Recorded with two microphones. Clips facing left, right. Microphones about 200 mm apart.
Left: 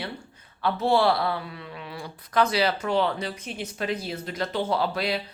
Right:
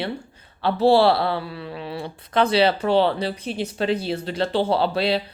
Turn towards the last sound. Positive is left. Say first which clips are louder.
# right 5 dB
turn(degrees=-30)  # may be behind; listen again after turning